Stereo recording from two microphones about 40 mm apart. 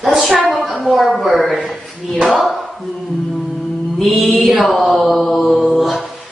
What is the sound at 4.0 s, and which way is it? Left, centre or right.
Mantra, centre.